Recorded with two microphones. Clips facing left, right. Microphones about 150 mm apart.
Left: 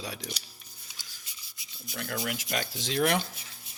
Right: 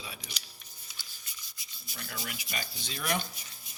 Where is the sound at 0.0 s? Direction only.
80° left.